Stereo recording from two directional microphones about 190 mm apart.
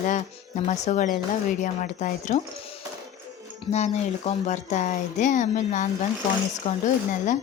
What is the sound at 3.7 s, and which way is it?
Speech, 35° left (ahead or behind).